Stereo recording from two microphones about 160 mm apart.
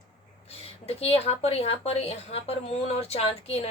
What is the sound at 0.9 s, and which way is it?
Speech, 40° left (ahead or behind).